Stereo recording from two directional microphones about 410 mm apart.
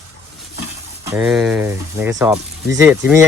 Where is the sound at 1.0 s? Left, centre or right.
Centre.